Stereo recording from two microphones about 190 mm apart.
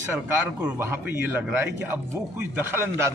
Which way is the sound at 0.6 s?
10° right (ahead or behind).